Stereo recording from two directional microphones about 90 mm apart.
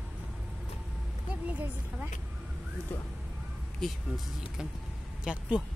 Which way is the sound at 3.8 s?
Centre (ahead or behind).